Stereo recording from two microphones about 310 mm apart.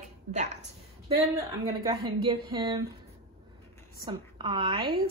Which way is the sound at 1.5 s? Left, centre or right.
Centre.